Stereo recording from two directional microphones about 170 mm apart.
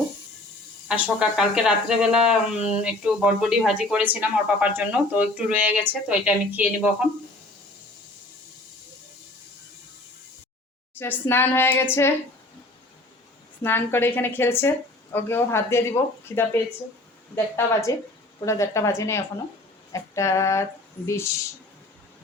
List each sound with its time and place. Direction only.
0.9 s speech: 5° right (ahead or behind)
10.9 s speech: 10° left (ahead or behind)
13.6 s speech: 15° left (ahead or behind)
19.9 s a sound: 15° left (ahead or behind)
21.1 s speech: 15° left (ahead or behind)